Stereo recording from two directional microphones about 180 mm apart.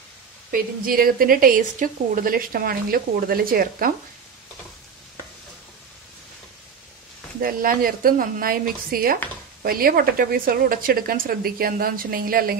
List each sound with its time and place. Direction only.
0.5 s a woman's voice: 50° right (ahead or behind)
7.4 s a woman's voice: 55° right (ahead or behind)